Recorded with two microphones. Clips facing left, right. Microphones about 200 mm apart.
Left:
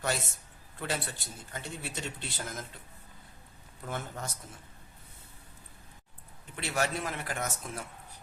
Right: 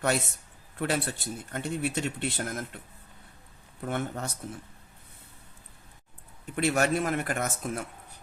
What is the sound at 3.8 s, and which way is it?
Speech, 65° right (ahead or behind).